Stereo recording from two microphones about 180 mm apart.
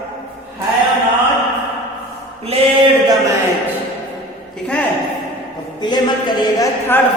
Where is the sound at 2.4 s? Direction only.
30° right (ahead or behind).